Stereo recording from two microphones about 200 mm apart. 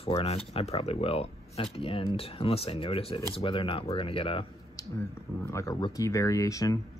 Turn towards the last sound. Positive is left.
turn(degrees=15)  # may be behind; listen again after turning